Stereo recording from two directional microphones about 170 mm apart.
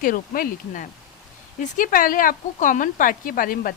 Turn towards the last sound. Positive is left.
turn(degrees=55)  # may be behind; listen again after turning